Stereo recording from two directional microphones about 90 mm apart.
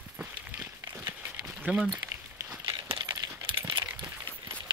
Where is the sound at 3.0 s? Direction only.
60° right (ahead or behind).